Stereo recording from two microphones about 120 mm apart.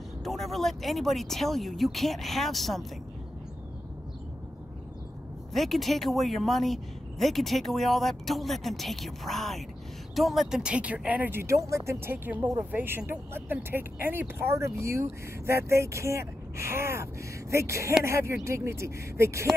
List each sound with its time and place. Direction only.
0.2 s a woman's voice: centre (ahead or behind)
5.5 s a woman's voice: centre (ahead or behind); by 19.5 s 25° right (ahead or behind)